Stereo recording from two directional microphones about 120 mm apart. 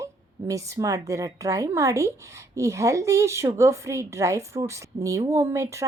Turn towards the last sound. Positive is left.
turn(degrees=-25)  # may be behind; listen again after turning